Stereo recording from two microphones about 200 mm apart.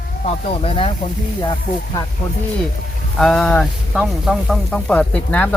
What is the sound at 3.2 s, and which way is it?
Speech, 5° left (ahead or behind).